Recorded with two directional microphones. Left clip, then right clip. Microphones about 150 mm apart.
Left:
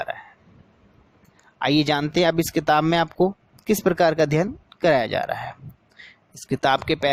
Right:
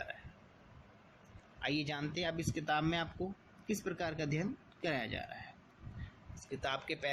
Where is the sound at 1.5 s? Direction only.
70° left (ahead or behind).